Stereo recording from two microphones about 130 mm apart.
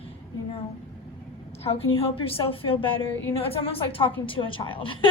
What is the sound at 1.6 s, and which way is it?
A woman's voice, 45° left (ahead or behind).